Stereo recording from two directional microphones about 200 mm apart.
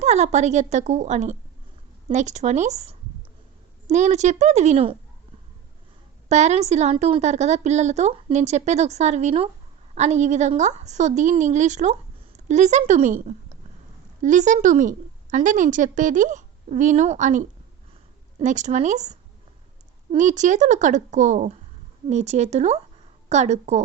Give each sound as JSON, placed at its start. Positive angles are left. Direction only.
{"t": 0.0, "sound": "a woman's voice", "side_deg": -35}
{"t": 6.2, "sound": "a woman's voice", "side_deg": -35}